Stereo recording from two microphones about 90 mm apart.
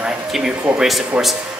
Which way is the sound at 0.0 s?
5° right (ahead or behind).